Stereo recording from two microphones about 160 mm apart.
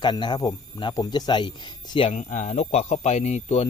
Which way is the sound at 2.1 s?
50° left (ahead or behind).